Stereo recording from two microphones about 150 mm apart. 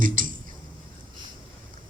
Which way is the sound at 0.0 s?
65° right (ahead or behind).